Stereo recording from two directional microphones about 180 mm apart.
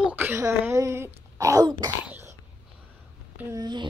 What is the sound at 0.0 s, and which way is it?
Wail, 10° right (ahead or behind).